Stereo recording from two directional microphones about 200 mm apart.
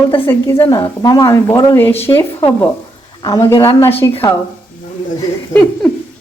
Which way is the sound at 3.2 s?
15° left (ahead or behind).